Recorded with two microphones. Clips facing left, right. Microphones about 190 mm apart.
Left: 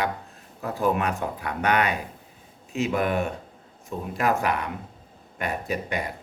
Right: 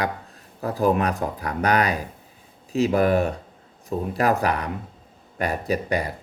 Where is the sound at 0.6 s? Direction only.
35° right (ahead or behind).